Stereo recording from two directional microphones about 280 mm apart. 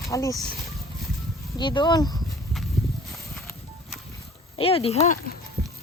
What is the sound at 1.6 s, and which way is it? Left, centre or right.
Speech, centre.